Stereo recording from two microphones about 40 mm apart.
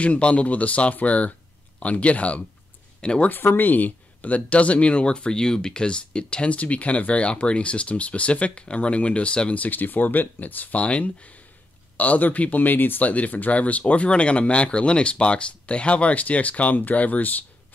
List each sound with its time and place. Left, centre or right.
0.0 s speech: left
3.0 s speech: left
3.3 s speech: left
9.6 s speech: left
12.0 s speech: left
13.0 s speech: left